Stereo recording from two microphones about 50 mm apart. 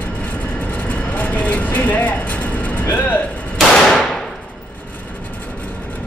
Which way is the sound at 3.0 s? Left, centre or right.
Left.